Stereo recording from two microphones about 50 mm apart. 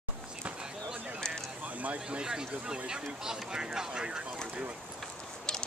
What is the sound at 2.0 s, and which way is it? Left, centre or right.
Speech, centre.